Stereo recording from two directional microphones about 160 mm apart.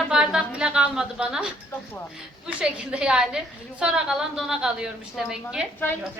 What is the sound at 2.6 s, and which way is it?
A woman's voice, 5° right (ahead or behind).